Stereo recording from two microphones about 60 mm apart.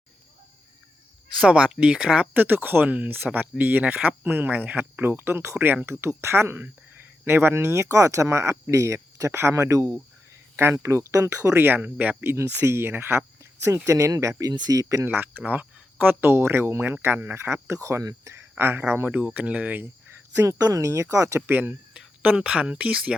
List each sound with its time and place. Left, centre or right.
1.5 s speech: right
2.3 s speech: right
11.5 s speech: right
12.2 s speech: right
15.0 s speech: right
16.3 s speech: right
17.3 s speech: right
18.3 s speech: right
19.1 s speech: right
20.3 s speech: right
21.4 s speech: right